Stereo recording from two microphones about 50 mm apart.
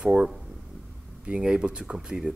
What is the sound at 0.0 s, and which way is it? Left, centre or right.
A man's voice, centre.